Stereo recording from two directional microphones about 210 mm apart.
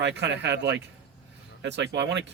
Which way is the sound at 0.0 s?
55° right (ahead or behind).